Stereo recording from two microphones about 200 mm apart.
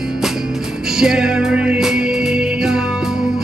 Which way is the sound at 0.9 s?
5° right (ahead or behind).